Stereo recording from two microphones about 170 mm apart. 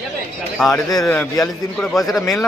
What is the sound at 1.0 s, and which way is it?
Speech, 15° left (ahead or behind).